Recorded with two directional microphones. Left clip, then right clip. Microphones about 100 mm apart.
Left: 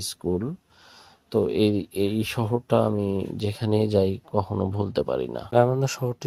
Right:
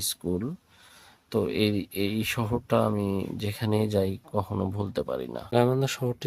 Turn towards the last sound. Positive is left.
turn(degrees=30)  # may be behind; listen again after turning